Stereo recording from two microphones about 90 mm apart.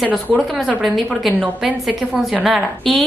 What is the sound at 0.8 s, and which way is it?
Speech, centre (ahead or behind).